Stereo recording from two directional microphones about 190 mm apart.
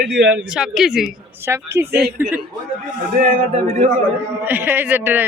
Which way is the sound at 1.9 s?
55° right (ahead or behind).